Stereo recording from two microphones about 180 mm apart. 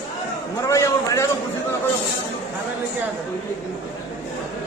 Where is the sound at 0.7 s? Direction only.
15° left (ahead or behind).